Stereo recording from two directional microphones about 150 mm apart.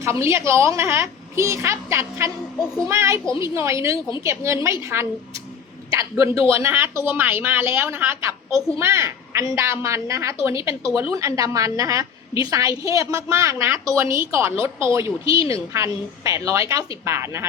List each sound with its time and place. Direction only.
0.0 s a woman's voice: 20° right (ahead or behind)